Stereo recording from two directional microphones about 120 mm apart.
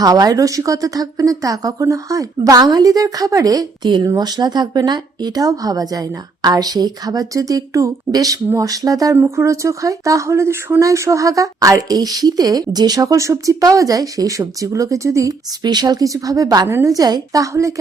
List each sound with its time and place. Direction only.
0.0 s speech: 30° right (ahead or behind)